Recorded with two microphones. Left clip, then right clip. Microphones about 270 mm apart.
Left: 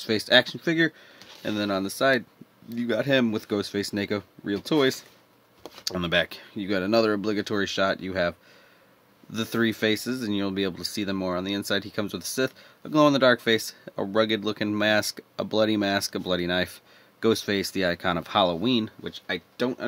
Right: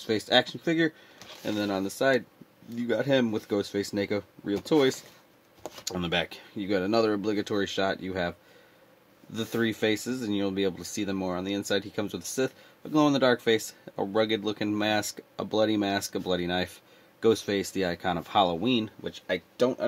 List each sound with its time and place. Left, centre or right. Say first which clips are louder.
0.0 s speech: left 4 dB; left